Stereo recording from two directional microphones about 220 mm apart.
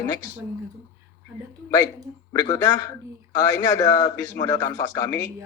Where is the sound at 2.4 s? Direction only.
15° left (ahead or behind).